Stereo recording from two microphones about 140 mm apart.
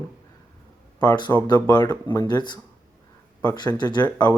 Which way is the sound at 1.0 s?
30° left (ahead or behind).